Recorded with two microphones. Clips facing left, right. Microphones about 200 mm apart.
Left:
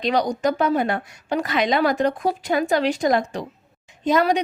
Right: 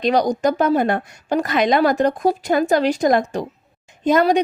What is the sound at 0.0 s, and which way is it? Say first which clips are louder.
A woman's voice: right 3 dB; 45° right (ahead or behind).